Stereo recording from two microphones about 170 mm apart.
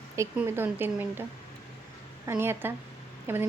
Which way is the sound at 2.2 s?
15° right (ahead or behind).